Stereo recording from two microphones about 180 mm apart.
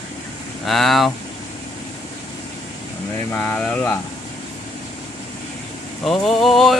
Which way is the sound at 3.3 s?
5° left (ahead or behind).